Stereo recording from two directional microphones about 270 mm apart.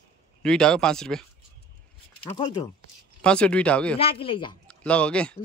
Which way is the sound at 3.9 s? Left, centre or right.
Left.